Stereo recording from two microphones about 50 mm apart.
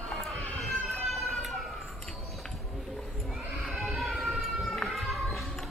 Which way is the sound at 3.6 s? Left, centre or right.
Centre.